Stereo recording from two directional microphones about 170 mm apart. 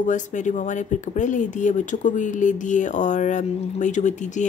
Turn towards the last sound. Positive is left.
turn(degrees=45)  # may be behind; listen again after turning